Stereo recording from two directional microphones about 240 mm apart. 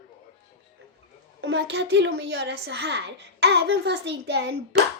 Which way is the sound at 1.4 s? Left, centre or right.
Right.